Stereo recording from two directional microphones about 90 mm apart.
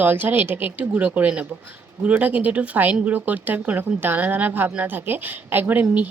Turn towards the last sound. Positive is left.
turn(degrees=-20)  # may be behind; listen again after turning